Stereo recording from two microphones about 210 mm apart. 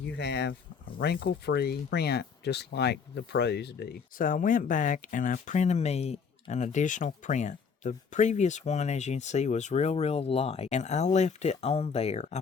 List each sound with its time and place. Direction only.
0.0 s speech: 55° left (ahead or behind); by 12.4 s 30° left (ahead or behind)